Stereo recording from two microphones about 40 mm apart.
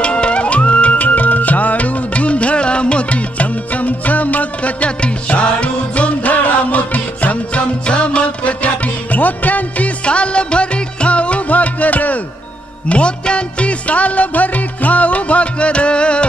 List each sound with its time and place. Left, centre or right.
0.0 s music: left
12.8 s music: left